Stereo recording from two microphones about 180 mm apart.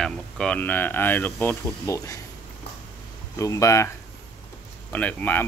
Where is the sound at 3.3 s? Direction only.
15° left (ahead or behind).